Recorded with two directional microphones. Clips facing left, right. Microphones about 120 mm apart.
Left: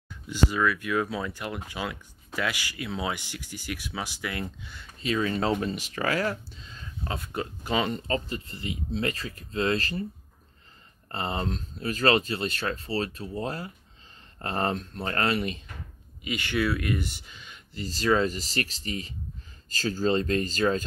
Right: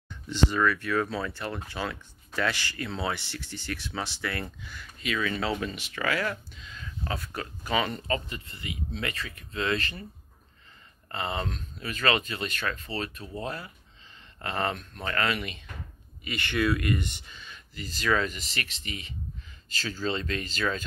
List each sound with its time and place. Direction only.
0.1 s speech: 5° left (ahead or behind); by 4.8 s 20° left (ahead or behind)
5.0 s speech: 35° left (ahead or behind)
11.1 s speech: 35° left (ahead or behind)
16.3 s speech: 10° left (ahead or behind)
17.7 s speech: 30° left (ahead or behind)